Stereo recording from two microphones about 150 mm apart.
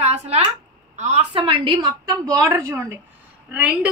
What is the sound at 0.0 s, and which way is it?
A woman's voice, 45° right (ahead or behind).